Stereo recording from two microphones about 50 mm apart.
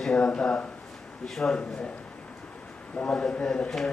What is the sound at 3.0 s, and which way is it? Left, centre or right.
Speech, left.